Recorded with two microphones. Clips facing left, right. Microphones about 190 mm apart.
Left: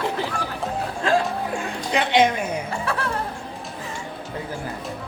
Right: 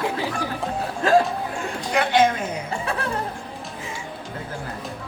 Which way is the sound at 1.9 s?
20° left (ahead or behind).